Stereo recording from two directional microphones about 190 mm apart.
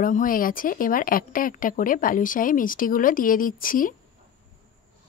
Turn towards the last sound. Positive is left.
turn(degrees=45)  # may be behind; listen again after turning